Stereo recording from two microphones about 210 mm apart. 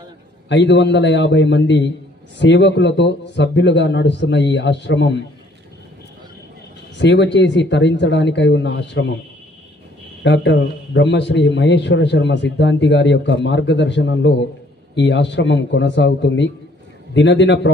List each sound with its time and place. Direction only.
0.5 s a man's voice: 55° left (ahead or behind)
7.0 s a man's voice: 55° left (ahead or behind)
10.2 s a man's voice: 60° left (ahead or behind)